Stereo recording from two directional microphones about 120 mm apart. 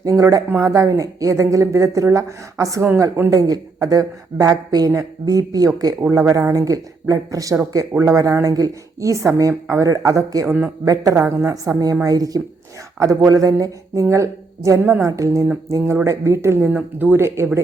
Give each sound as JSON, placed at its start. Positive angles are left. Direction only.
{"t": 0.0, "sound": "speech", "side_deg": -30}
{"t": 3.2, "sound": "speech", "side_deg": -30}